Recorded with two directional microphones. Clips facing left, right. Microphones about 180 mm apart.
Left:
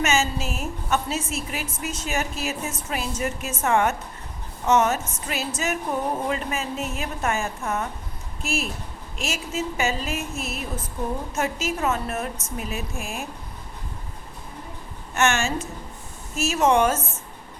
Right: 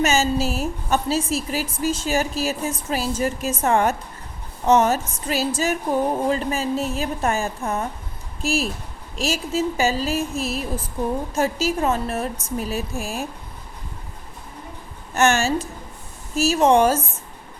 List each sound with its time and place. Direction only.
0.0 s a woman's voice: 35° right (ahead or behind)
15.1 s a woman's voice: 35° right (ahead or behind)